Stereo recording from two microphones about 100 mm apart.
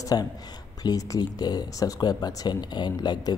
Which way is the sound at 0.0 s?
40° left (ahead or behind).